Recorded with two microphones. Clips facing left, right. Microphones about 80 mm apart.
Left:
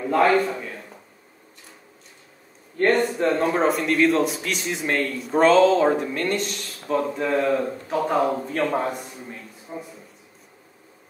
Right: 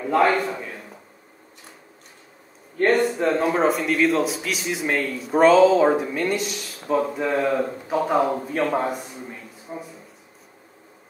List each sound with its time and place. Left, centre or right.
0.0 s a man's voice: centre
2.8 s a man's voice: centre